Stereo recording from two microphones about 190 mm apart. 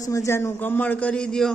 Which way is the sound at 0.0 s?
15° left (ahead or behind).